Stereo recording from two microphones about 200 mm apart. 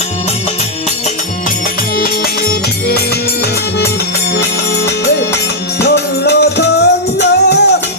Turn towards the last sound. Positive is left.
turn(degrees=55)  # may be behind; listen again after turning